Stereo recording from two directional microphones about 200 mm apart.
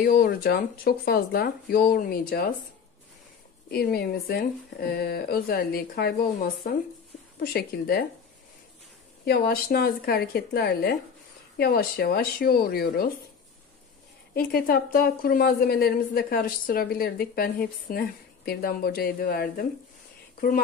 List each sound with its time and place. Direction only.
0.0 s a woman's voice: 45° left (ahead or behind)
3.7 s a woman's voice: 50° left (ahead or behind)
9.2 s a woman's voice: 50° left (ahead or behind)
14.3 s a woman's voice: 50° left (ahead or behind)